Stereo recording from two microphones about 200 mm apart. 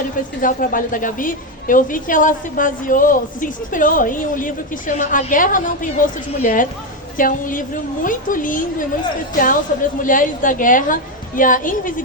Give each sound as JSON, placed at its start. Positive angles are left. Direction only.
{"t": 0.4, "sound": "a woman's voice", "side_deg": 40}